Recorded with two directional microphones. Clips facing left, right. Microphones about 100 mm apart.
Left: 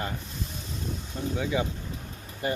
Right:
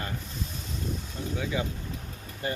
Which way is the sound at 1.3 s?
25° left (ahead or behind).